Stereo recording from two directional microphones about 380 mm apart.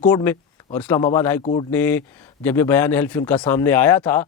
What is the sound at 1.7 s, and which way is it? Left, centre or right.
Speech, centre.